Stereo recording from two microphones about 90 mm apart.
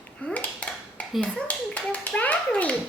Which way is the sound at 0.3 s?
15° left (ahead or behind).